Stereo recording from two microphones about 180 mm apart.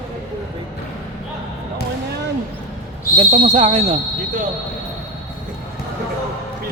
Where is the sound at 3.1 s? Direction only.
35° right (ahead or behind).